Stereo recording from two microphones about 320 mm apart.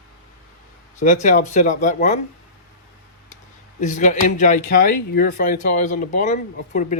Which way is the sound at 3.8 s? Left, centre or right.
Left.